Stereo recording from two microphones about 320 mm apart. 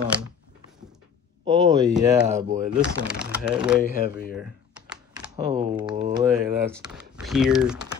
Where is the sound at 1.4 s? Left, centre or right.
Centre.